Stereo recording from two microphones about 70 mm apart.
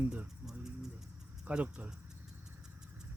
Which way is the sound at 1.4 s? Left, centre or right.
Right.